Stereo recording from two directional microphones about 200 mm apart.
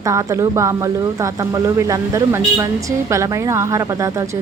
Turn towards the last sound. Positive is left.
turn(degrees=-15)  # may be behind; listen again after turning